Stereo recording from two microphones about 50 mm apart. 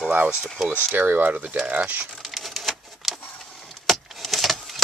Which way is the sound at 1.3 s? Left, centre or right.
Right.